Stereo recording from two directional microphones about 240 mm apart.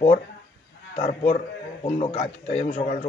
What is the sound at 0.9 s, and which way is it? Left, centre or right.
Speech, left.